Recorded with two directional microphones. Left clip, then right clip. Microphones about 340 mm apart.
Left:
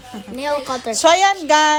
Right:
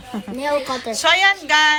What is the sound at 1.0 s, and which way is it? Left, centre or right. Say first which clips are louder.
Speech: left 2 dB; centre.